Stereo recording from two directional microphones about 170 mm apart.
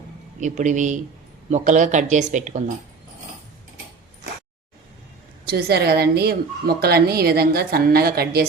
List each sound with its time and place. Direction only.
0.3 s speech: 45° right (ahead or behind)
5.5 s speech: 65° right (ahead or behind)